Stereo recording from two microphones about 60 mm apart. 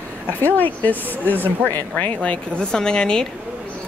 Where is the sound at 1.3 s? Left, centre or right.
Right.